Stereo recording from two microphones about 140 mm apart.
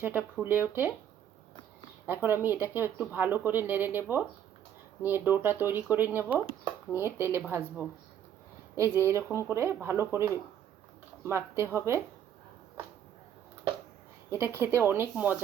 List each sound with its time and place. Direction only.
0.0 s speech: 15° right (ahead or behind)
2.0 s speech: 15° right (ahead or behind)
5.0 s speech: 15° right (ahead or behind)
14.3 s speech: 20° right (ahead or behind)